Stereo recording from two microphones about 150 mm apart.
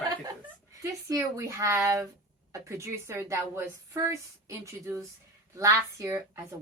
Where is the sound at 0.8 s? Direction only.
20° right (ahead or behind).